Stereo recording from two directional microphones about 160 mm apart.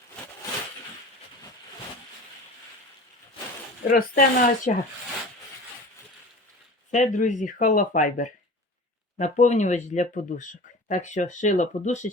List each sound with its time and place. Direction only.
3.8 s speech: 60° left (ahead or behind)
6.9 s speech: 50° left (ahead or behind)